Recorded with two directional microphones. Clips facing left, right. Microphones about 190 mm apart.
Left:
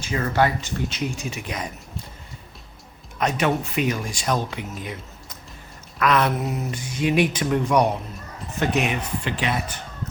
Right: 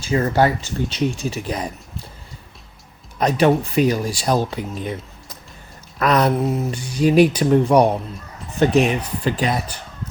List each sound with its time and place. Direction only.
0.0 s speech: 30° right (ahead or behind)
3.2 s speech: 35° right (ahead or behind)
6.0 s speech: 35° right (ahead or behind)